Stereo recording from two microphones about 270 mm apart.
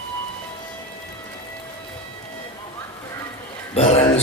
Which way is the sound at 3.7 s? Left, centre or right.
Left.